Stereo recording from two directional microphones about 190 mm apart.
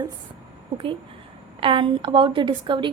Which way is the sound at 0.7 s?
30° right (ahead or behind).